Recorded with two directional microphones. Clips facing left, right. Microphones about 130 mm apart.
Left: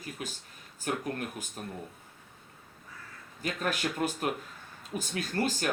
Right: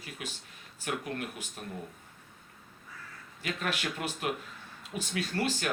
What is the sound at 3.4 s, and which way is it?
Speech, 40° left (ahead or behind).